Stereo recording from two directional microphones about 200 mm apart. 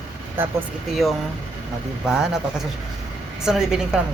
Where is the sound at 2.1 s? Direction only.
Centre (ahead or behind).